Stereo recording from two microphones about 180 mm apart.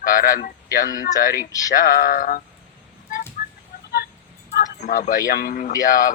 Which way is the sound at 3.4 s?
50° left (ahead or behind).